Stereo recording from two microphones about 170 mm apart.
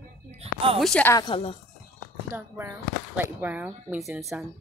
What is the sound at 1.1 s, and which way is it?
Speech, 25° left (ahead or behind).